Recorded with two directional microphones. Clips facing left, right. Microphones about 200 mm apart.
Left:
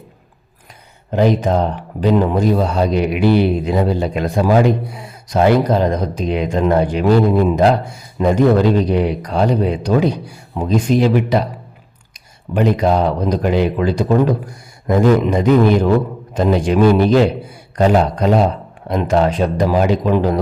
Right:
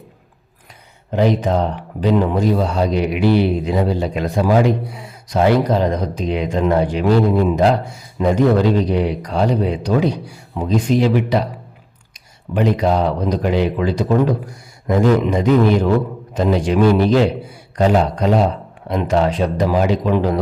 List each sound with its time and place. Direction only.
2.0 s speech: 45° left (ahead or behind)